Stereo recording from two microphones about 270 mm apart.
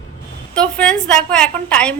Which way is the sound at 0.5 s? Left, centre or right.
Centre.